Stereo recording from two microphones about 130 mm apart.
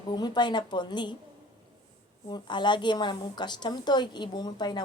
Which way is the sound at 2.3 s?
35° left (ahead or behind).